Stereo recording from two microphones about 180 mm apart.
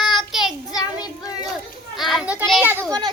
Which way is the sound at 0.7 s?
20° left (ahead or behind).